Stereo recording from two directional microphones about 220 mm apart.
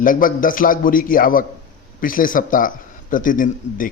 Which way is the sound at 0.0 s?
40° left (ahead or behind).